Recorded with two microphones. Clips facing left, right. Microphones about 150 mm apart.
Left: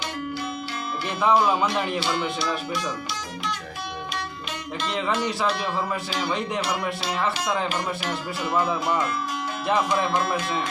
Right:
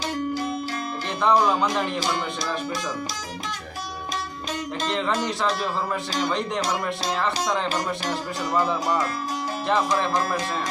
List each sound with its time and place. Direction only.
1.2 s speech: 5° left (ahead or behind)
2.0 s speech: 40° right (ahead or behind)
4.9 s speech: 5° left (ahead or behind)
7.7 s speech: 35° right (ahead or behind)
10.1 s speech: 40° right (ahead or behind)